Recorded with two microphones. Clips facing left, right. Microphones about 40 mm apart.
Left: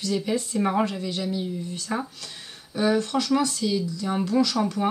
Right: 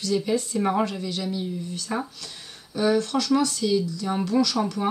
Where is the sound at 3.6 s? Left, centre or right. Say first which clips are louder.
Right 2 dB; centre.